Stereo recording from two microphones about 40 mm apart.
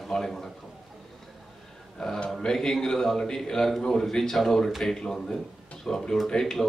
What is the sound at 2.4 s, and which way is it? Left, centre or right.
Speech, centre.